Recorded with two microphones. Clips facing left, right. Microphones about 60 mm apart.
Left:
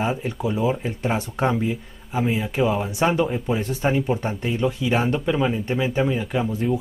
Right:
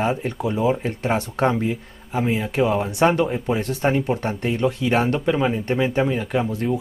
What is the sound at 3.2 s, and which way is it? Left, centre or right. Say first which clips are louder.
Speech: right 1 dB; centre.